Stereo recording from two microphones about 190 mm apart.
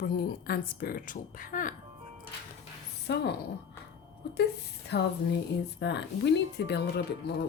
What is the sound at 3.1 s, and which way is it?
Speech, 65° left (ahead or behind).